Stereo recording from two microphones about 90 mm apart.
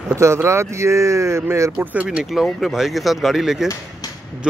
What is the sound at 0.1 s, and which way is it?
Speech, 35° right (ahead or behind).